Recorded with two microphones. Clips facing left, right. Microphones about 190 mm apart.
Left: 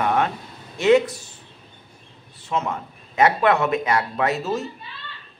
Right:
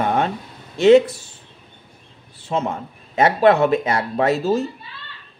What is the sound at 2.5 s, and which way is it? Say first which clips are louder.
Speech: right 3 dB; 30° right (ahead or behind).